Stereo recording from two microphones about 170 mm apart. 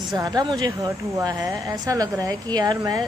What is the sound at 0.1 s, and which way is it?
A woman's voice, 25° right (ahead or behind).